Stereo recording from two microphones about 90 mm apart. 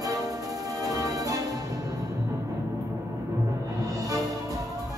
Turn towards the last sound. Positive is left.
turn(degrees=-40)  # may be behind; listen again after turning